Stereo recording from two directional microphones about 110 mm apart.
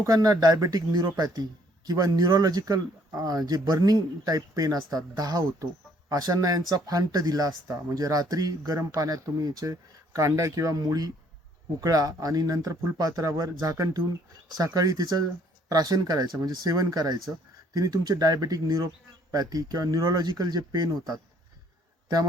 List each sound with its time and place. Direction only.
0.0 s speech: 35° right (ahead or behind)